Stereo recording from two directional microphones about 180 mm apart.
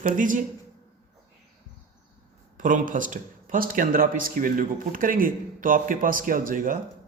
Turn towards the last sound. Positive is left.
turn(degrees=-50)  # may be behind; listen again after turning